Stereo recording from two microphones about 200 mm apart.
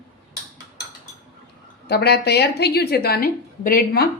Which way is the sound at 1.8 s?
55° left (ahead or behind).